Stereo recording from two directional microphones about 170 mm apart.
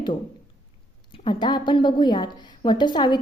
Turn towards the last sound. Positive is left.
turn(degrees=25)  # may be behind; listen again after turning